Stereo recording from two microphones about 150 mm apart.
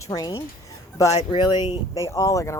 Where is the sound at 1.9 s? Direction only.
20° left (ahead or behind).